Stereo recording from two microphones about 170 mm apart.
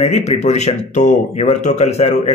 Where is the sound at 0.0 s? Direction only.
40° left (ahead or behind).